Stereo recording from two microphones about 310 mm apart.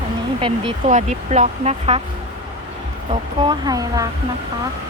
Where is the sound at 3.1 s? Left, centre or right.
Centre.